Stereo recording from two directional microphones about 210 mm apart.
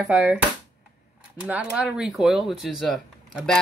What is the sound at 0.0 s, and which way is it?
Speech, 5° right (ahead or behind).